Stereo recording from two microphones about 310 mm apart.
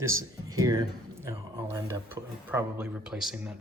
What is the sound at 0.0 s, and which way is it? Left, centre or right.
Speech, centre.